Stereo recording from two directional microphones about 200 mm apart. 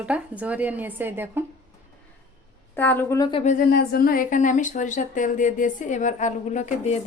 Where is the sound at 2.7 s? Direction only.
10° left (ahead or behind).